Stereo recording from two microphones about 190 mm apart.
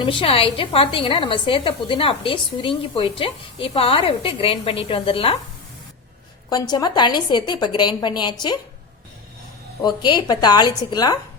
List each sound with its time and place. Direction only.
0.0 s a woman's voice: 25° left (ahead or behind)
6.5 s a woman's voice: 20° left (ahead or behind)
9.8 s a woman's voice: 25° left (ahead or behind)